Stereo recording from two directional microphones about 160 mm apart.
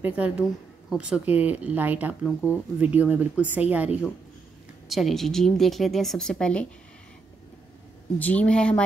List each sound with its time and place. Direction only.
0.0 s a woman's voice: 10° right (ahead or behind)
4.8 s speech: centre (ahead or behind)
8.2 s speech: 10° left (ahead or behind)